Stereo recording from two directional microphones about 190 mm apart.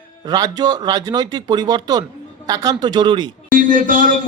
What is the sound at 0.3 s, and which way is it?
Speech, 20° right (ahead or behind).